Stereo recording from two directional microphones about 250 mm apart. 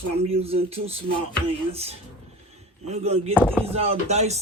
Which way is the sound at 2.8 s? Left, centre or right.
Right.